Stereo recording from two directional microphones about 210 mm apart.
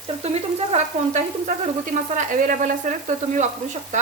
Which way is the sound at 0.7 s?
35° right (ahead or behind).